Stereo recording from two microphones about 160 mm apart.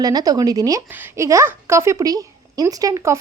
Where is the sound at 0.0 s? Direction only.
25° right (ahead or behind).